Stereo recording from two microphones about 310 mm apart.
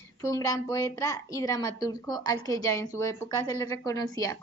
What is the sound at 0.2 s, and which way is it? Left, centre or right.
A woman's voice, centre.